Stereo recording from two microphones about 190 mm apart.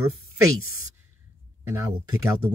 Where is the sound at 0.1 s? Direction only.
90° right.